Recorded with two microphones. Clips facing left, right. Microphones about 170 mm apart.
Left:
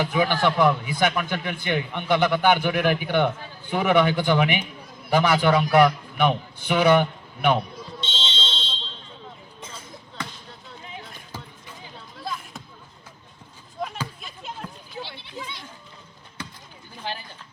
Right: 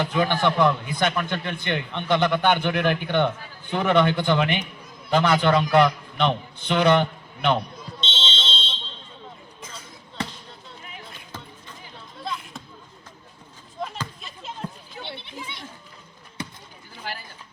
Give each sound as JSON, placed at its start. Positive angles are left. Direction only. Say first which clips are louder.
{"t": 0.0, "sound": "a man's voice", "louder": "even", "side_deg": 10}
{"t": 8.0, "sound": "fire alarm", "louder": "right 2 dB", "side_deg": -25}
{"t": 12.2, "sound": "basketball bounce", "louder": "right 1 dB", "side_deg": 0}
{"t": 13.8, "sound": "a sound", "louder": "left 1 dB", "side_deg": 0}
{"t": 14.6, "sound": "goat", "louder": "right 3 dB", "side_deg": -20}
{"t": 17.0, "sound": "a sound", "louder": "left 2 dB", "side_deg": 20}